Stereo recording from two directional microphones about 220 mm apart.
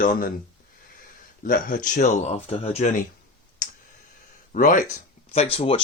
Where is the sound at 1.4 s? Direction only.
35° left (ahead or behind).